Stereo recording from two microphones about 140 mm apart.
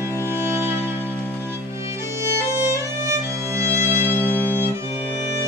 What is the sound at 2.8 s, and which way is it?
Violin, 20° right (ahead or behind).